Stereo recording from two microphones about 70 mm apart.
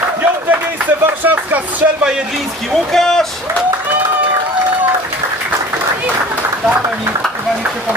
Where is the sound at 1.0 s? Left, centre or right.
Right.